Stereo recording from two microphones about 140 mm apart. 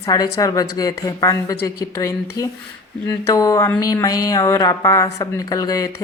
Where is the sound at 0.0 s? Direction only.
25° left (ahead or behind).